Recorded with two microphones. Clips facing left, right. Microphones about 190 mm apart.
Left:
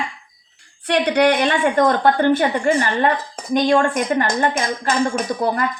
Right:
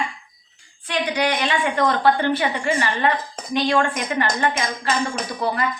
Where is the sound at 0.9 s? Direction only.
65° left (ahead or behind); by 4.9 s 45° left (ahead or behind).